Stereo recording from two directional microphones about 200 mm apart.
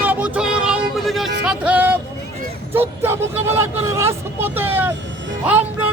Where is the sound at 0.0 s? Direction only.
10° right (ahead or behind).